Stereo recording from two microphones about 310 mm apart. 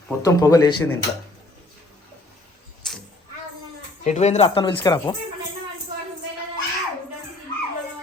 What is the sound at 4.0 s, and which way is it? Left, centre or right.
A man's voice, left.